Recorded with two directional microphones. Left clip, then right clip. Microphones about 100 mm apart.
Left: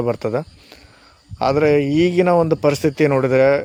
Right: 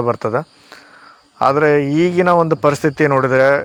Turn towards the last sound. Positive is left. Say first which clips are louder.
# right 2 dB
turn(degrees=25)  # may be behind; listen again after turning